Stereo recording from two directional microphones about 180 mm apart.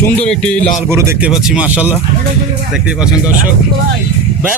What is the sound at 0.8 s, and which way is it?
Speech, 15° right (ahead or behind).